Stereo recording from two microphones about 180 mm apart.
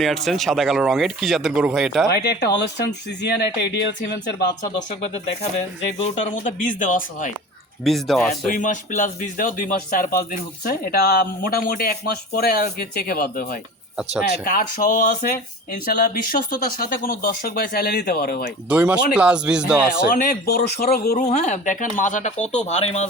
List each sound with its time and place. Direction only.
0.0 s speech: centre (ahead or behind)
2.0 s speech: 65° left (ahead or behind)
5.0 s speech: 35° left (ahead or behind)
6.7 s speech: 45° left (ahead or behind)
7.9 s speech: centre (ahead or behind)
8.3 s speech: 45° left (ahead or behind)
18.7 s speech: 5° right (ahead or behind)
20.1 s a man's voice: 60° left (ahead or behind)
21.2 s speech: 40° left (ahead or behind)